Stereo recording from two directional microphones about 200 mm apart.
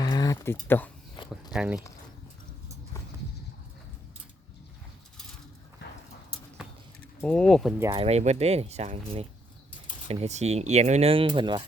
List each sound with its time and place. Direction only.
0.0 s a sound: 20° left (ahead or behind)
1.5 s speech: 5° right (ahead or behind)
7.3 s speech: 5° left (ahead or behind)
7.8 s speech: 15° right (ahead or behind)
8.0 s speech: 35° right (ahead or behind)